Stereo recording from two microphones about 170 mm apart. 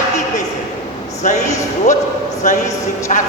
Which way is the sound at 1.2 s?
45° left (ahead or behind).